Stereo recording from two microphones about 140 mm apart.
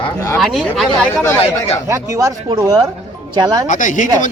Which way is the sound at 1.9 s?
20° right (ahead or behind).